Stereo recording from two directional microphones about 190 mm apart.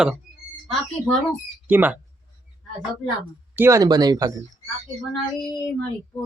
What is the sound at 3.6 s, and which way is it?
Speech, 15° right (ahead or behind).